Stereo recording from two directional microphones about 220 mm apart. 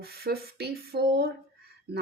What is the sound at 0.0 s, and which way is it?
Speech, 45° right (ahead or behind).